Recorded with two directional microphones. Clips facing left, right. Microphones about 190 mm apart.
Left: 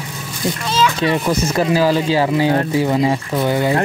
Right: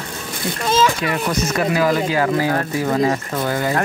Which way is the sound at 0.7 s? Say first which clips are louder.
Right 2 dB; 50° right (ahead or behind).